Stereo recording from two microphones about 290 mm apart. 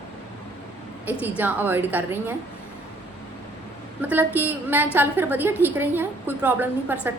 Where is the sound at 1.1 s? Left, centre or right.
Centre.